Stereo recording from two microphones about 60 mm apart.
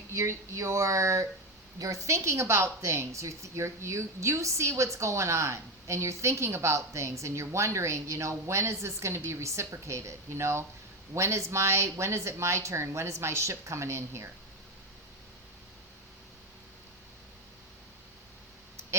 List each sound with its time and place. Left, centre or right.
0.1 s a woman's voice: right
1.8 s a woman's voice: right